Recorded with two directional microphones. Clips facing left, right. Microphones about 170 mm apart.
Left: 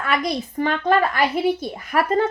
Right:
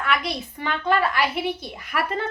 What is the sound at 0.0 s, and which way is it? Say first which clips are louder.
A woman's voice: left 3 dB; 45° left (ahead or behind).